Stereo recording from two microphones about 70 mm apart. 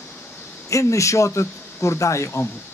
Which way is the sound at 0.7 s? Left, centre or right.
Left.